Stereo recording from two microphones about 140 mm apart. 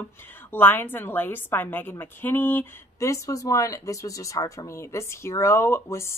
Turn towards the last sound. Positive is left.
turn(degrees=20)  # may be behind; listen again after turning